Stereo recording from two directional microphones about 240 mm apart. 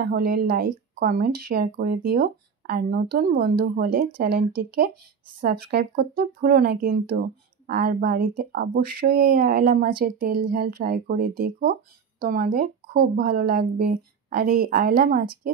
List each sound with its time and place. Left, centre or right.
0.0 s speech: right